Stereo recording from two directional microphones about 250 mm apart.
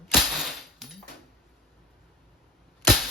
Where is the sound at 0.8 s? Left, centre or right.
Centre.